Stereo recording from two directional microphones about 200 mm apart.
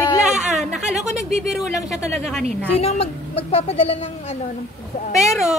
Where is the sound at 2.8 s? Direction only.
30° left (ahead or behind).